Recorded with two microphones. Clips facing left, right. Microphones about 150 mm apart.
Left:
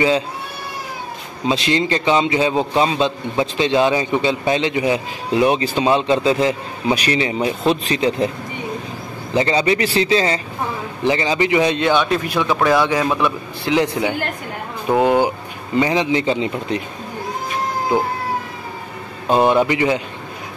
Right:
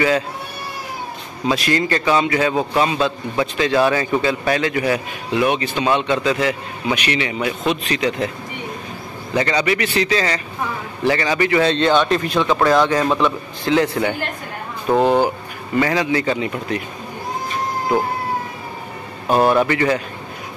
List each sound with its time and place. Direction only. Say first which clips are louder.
1.5 s a man's voice: left 1 dB; 25° left (ahead or behind)
5.3 s a man's voice: left 2 dB; 30° left (ahead or behind)
9.3 s a man's voice: left 2 dB; 25° left (ahead or behind)
19.2 s a man's voice: left 1 dB; 20° left (ahead or behind)